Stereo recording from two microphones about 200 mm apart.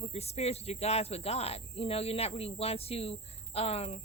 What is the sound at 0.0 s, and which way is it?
Speech, 30° left (ahead or behind).